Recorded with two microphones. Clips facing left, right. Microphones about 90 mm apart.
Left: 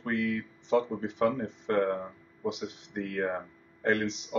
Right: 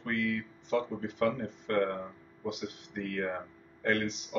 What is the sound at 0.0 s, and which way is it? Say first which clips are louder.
Speech: left 2 dB; 20° left (ahead or behind).